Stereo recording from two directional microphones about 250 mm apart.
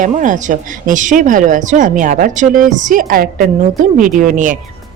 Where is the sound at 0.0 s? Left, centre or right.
Right.